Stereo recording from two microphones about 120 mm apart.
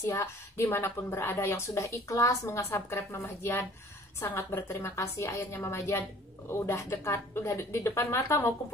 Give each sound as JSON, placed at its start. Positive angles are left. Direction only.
{"t": 0.0, "sound": "a woman's voice", "side_deg": 25}